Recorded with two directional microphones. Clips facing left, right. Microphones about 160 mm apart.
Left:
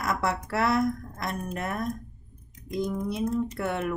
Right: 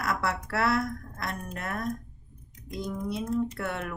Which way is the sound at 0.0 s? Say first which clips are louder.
Left 2 dB; 15° left (ahead or behind).